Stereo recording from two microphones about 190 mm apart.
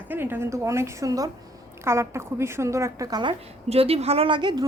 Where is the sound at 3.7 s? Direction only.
30° right (ahead or behind).